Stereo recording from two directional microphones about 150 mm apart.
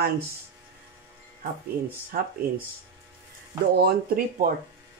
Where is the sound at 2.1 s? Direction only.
75° right (ahead or behind).